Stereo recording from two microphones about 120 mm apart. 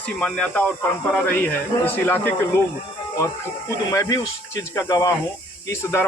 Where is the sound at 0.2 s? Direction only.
10° left (ahead or behind).